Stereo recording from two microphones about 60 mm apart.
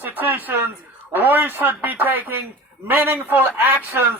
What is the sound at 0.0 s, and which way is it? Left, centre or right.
A man's voice, right.